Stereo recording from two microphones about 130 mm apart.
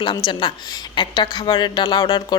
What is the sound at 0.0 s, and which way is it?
Speech, 35° left (ahead or behind).